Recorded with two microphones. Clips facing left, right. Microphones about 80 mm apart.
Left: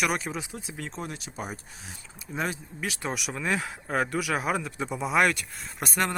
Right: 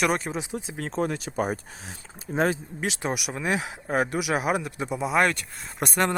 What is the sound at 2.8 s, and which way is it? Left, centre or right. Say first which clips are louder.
Speech: right 3 dB; centre.